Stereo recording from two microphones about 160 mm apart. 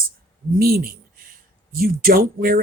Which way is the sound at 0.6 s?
70° right (ahead or behind).